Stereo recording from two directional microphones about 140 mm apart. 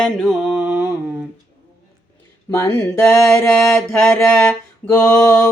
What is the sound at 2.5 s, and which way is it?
Music, 20° left (ahead or behind).